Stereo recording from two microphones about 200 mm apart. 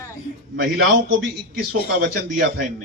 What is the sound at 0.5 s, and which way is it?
Speech, 60° right (ahead or behind).